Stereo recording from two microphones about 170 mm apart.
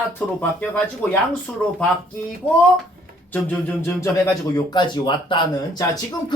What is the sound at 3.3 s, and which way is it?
Speech, 10° left (ahead or behind).